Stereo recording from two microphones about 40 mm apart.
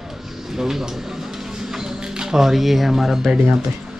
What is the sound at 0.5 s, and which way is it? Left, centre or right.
Music, centre.